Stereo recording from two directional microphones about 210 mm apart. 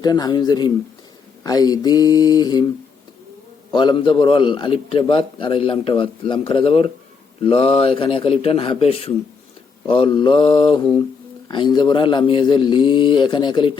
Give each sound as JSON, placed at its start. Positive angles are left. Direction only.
{"t": 0.0, "sound": "a man's voice", "side_deg": 20}
{"t": 3.7, "sound": "a man's voice", "side_deg": 20}